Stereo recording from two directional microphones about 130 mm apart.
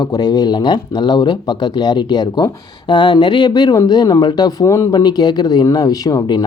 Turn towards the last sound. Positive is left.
turn(degrees=30)  # may be behind; listen again after turning